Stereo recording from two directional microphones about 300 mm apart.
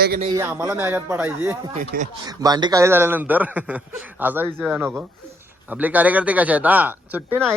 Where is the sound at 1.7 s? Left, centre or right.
Right.